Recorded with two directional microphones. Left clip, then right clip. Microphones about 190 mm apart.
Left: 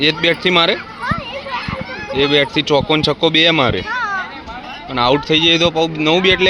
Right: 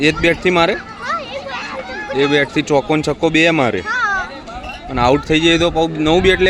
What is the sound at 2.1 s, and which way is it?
Speech, 15° right (ahead or behind).